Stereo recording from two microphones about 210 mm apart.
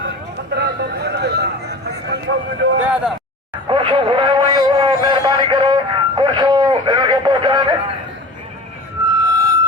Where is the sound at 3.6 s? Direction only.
25° right (ahead or behind).